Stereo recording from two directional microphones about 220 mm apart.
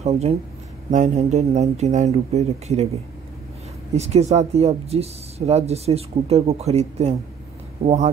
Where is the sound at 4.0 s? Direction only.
30° right (ahead or behind).